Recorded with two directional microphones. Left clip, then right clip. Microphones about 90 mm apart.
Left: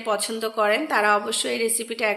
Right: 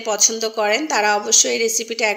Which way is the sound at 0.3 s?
25° right (ahead or behind).